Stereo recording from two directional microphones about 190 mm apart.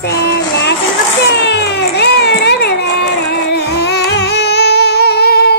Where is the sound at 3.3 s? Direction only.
60° left (ahead or behind).